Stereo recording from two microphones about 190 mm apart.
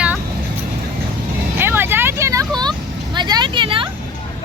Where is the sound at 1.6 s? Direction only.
10° right (ahead or behind); by 3.9 s 25° right (ahead or behind).